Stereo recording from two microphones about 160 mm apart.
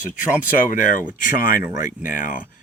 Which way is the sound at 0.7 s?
55° left (ahead or behind).